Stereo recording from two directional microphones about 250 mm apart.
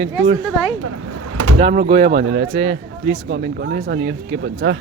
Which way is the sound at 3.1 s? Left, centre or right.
Right.